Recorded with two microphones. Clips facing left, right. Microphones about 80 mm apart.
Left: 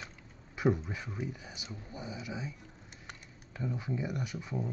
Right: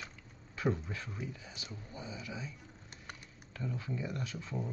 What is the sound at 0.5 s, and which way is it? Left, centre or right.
Speech, centre.